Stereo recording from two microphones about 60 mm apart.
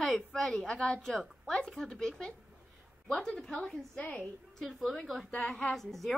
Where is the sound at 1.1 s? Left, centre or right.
Centre.